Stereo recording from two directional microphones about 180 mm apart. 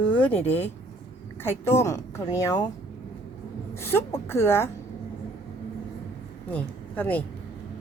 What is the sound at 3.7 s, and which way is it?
Speech, 15° left (ahead or behind).